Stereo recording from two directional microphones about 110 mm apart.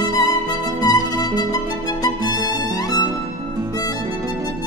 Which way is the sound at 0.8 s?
35° left (ahead or behind).